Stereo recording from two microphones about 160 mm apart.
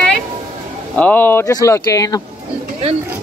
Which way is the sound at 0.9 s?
10° left (ahead or behind).